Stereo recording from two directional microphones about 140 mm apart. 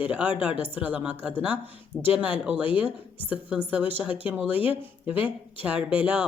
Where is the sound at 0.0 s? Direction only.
10° right (ahead or behind).